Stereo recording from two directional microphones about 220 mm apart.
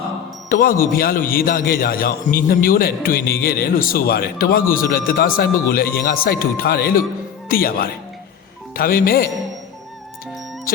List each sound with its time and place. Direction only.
0.4 s a man's voice: 40° left (ahead or behind)